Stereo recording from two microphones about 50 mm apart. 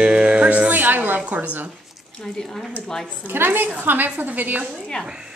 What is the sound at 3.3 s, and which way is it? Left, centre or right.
A woman's voice, right.